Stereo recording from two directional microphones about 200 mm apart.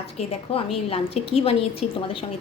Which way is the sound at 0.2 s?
30° left (ahead or behind).